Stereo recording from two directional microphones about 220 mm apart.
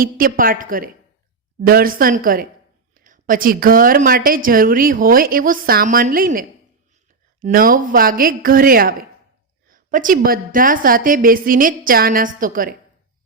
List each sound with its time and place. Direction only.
0.0 s a woman's voice: 40° right (ahead or behind)
7.4 s a woman's voice: 40° right (ahead or behind)